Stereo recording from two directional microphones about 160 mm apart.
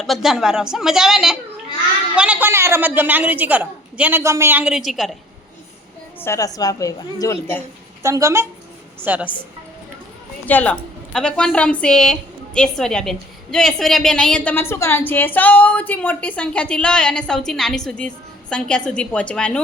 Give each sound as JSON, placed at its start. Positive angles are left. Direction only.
{"t": 0.0, "sound": "a woman's voice", "side_deg": 0}
{"t": 6.1, "sound": "a woman's voice", "side_deg": 15}
{"t": 8.0, "sound": "a woman's voice", "side_deg": -20}
{"t": 10.4, "sound": "a woman's voice", "side_deg": 10}